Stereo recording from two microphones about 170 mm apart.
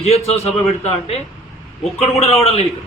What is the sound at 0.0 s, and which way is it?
Speech, 35° left (ahead or behind).